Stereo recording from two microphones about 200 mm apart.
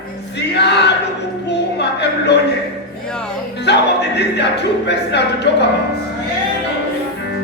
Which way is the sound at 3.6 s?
60° left (ahead or behind).